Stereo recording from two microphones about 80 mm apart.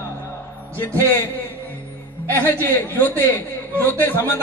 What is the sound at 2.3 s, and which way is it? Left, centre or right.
A man's voice, left.